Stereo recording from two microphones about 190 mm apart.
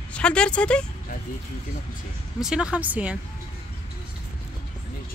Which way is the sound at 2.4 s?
5° right (ahead or behind).